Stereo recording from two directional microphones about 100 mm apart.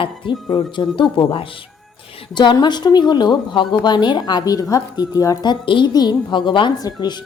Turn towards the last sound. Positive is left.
turn(degrees=40)  # may be behind; listen again after turning